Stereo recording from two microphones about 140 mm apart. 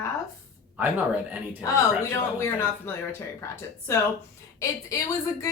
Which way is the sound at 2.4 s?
15° left (ahead or behind).